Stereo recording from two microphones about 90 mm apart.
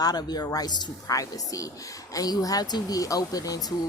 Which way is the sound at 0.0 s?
50° left (ahead or behind).